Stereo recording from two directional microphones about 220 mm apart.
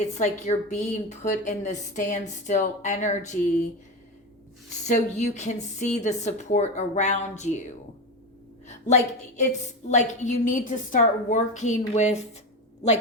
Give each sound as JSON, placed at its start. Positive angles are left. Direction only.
{"t": 0.0, "sound": "a woman's voice", "side_deg": 30}
{"t": 4.9, "sound": "a woman's voice", "side_deg": 30}
{"t": 8.6, "sound": "a woman's voice", "side_deg": 30}